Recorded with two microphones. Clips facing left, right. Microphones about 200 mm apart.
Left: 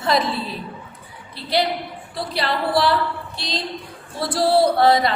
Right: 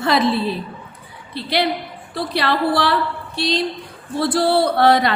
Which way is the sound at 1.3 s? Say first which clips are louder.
Right 1 dB; 70° right (ahead or behind).